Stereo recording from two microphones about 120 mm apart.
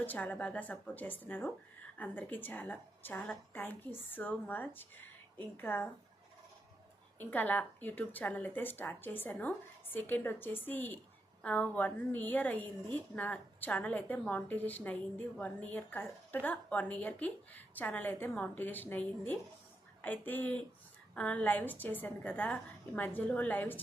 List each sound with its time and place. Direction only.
0.0 s a woman's voice: 15° left (ahead or behind)
7.2 s a woman's voice: 15° left (ahead or behind)